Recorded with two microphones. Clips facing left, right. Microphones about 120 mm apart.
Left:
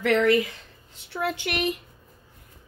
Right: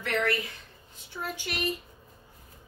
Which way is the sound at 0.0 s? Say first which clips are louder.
Left 8 dB; 90° left.